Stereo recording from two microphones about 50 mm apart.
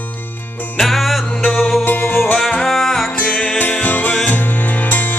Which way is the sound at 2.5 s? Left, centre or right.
Centre.